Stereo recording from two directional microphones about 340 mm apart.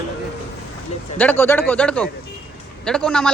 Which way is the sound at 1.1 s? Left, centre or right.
Centre.